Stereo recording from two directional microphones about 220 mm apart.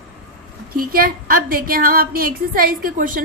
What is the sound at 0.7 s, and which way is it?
A woman's voice, 40° right (ahead or behind).